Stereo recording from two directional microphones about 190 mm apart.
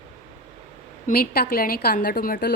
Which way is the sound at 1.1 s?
50° left (ahead or behind).